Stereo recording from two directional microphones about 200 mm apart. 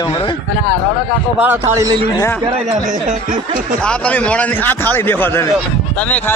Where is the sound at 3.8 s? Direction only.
5° left (ahead or behind).